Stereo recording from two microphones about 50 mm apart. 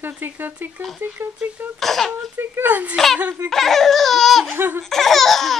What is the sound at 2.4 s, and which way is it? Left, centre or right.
Speech, right.